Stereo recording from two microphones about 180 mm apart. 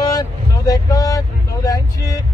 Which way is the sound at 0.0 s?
20° left (ahead or behind).